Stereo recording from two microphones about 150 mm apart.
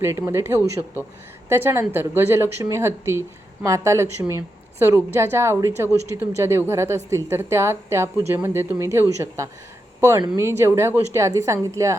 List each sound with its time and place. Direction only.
0.0 s a woman's voice: 15° right (ahead or behind)